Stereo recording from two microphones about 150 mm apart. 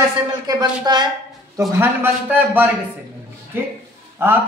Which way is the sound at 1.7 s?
15° right (ahead or behind).